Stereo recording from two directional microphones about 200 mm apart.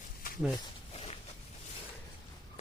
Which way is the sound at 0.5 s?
30° left (ahead or behind).